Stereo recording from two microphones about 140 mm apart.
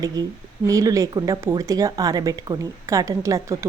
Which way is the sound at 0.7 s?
25° right (ahead or behind).